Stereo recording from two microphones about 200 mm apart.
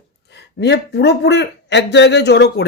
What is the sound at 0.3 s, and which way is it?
Speech, 60° left (ahead or behind).